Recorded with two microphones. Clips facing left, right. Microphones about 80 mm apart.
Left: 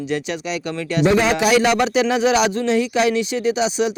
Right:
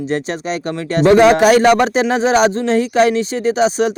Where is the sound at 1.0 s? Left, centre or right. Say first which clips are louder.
Right 8 dB; right.